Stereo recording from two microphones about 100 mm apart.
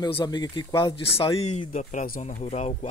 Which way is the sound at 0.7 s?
60° left (ahead or behind).